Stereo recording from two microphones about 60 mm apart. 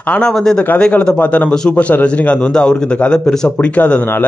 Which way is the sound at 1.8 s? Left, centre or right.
Left.